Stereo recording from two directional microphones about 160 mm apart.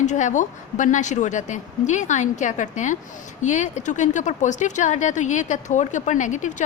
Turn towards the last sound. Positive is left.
turn(degrees=50)  # may be behind; listen again after turning